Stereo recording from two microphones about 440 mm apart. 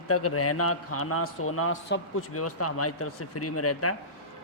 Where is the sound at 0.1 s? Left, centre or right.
Left.